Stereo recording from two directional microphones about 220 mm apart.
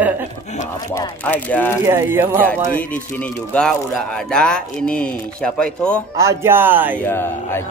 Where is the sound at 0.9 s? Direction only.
10° left (ahead or behind).